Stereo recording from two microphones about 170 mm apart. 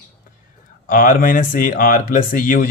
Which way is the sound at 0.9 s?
50° left (ahead or behind).